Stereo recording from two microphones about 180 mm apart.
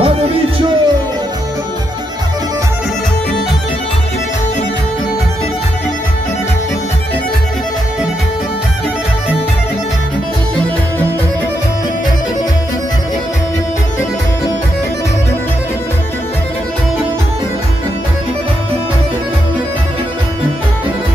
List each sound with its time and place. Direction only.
0.0 s music: 35° right (ahead or behind)